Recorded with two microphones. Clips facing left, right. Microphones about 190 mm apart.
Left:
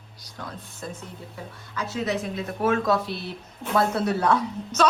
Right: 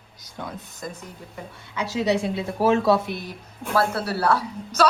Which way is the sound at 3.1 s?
10° right (ahead or behind).